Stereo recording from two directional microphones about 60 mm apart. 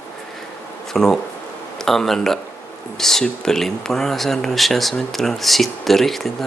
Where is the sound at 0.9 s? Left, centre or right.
Centre.